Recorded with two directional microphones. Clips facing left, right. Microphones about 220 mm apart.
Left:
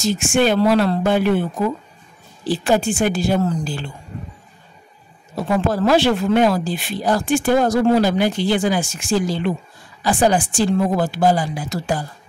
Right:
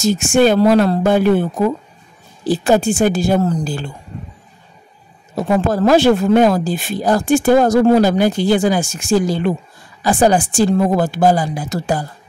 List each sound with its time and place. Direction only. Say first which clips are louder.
0.0 s speech: right 4 dB; 45° right (ahead or behind)
2.7 s speech: right 4 dB; 45° right (ahead or behind)
5.3 s speech: right 3 dB; 45° right (ahead or behind)